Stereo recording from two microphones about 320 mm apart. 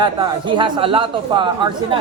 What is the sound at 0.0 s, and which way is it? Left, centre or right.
Speech, centre.